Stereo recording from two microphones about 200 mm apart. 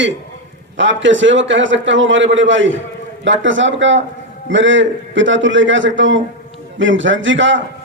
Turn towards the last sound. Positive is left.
turn(degrees=-70)  # may be behind; listen again after turning